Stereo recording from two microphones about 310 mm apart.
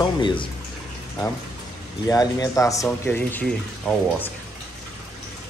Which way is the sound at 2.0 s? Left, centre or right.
Centre.